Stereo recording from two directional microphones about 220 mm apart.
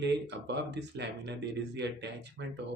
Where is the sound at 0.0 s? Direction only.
50° right (ahead or behind).